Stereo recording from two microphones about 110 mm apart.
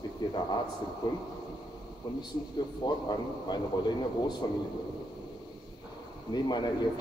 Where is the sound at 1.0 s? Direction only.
35° left (ahead or behind).